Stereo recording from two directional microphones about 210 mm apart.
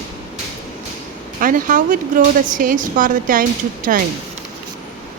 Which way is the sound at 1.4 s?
40° right (ahead or behind).